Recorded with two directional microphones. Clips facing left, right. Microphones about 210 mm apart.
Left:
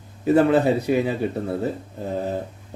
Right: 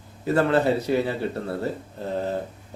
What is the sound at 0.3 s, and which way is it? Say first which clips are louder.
A man's voice: left 4 dB; 15° left (ahead or behind).